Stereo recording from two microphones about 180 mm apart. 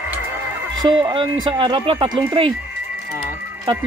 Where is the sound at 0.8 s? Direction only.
25° right (ahead or behind).